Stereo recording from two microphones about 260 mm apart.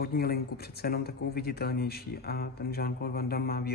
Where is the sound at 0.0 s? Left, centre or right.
Left.